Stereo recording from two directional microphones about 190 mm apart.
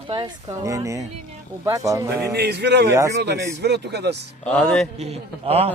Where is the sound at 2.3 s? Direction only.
60° right (ahead or behind).